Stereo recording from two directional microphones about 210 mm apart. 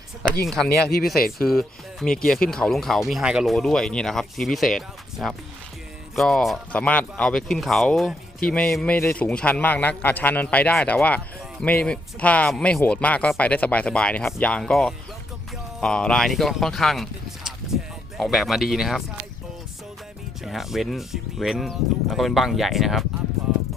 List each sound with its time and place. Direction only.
0.4 s speech: centre (ahead or behind)
1.1 s speech: 45° left (ahead or behind)
1.5 s speech: centre (ahead or behind)
20.4 s speech: centre (ahead or behind)